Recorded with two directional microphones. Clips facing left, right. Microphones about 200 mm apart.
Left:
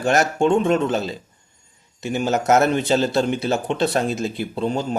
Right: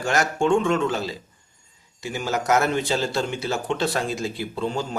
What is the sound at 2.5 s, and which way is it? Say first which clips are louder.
A man's voice: left 5 dB; 20° left (ahead or behind).